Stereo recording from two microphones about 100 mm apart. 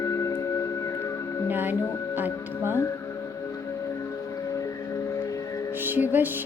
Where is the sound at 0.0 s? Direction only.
35° left (ahead or behind).